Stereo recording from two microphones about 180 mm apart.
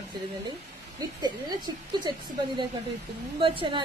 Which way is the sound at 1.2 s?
25° right (ahead or behind).